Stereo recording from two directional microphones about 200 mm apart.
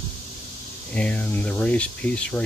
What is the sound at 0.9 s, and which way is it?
Speech, 5° left (ahead or behind).